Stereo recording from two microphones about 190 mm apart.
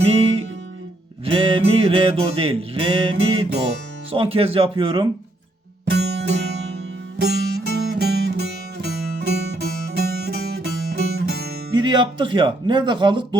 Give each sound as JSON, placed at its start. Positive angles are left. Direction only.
{"t": 0.0, "sound": "music", "side_deg": -35}
{"t": 5.9, "sound": "music", "side_deg": -60}
{"t": 11.8, "sound": "music", "side_deg": -25}